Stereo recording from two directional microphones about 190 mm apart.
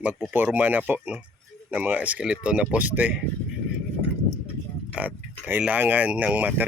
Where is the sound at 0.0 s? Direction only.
5° right (ahead or behind).